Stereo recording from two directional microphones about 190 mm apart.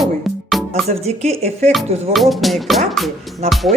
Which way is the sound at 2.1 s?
Centre (ahead or behind).